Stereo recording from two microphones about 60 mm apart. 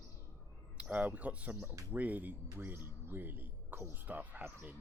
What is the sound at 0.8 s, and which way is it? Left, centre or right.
A man's voice, right.